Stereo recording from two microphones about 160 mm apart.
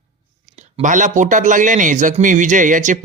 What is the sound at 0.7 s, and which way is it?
A man's voice, 50° right (ahead or behind).